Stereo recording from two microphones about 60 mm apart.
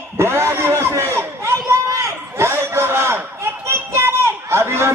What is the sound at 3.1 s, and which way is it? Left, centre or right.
Chatter, right.